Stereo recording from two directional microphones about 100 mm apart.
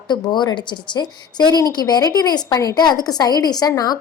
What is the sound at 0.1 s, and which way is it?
A woman's voice, 45° left (ahead or behind).